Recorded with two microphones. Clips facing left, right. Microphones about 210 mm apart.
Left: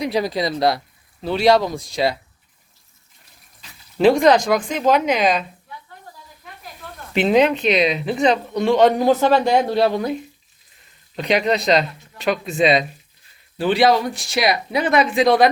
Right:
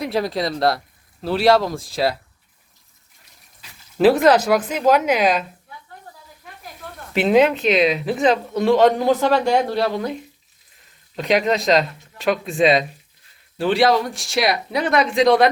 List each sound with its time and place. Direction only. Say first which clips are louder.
0.0 s speech: left 1 dB; centre (ahead or behind)
3.6 s speech: even; 5° right (ahead or behind)
7.1 s speech: even; 5° right (ahead or behind)
9.0 s speech: left 2 dB; 20° left (ahead or behind)
11.2 s speech: even; centre (ahead or behind)